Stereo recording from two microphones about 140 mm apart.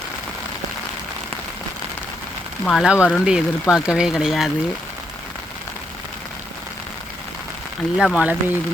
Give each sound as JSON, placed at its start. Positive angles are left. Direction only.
{"t": 2.6, "sound": "speech", "side_deg": 0}
{"t": 7.9, "sound": "speech", "side_deg": -5}